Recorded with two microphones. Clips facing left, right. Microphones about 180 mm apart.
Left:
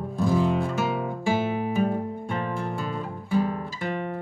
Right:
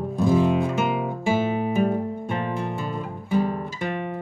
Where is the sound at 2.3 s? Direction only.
20° right (ahead or behind).